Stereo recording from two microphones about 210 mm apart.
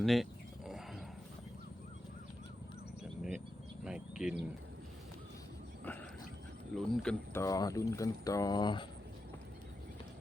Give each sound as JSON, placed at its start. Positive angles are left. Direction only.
{"t": 0.0, "sound": "roaring cats", "side_deg": 0}
{"t": 3.8, "sound": "bird", "side_deg": -5}
{"t": 6.7, "sound": "speech", "side_deg": 5}
{"t": 7.4, "sound": "speech", "side_deg": 15}